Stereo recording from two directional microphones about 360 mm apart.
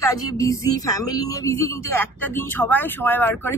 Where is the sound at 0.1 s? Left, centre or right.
Centre.